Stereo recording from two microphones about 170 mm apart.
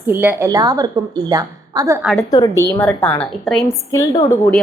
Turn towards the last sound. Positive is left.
turn(degrees=20)  # may be behind; listen again after turning